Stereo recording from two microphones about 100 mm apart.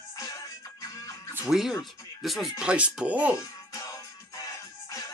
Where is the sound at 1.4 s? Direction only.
5° right (ahead or behind).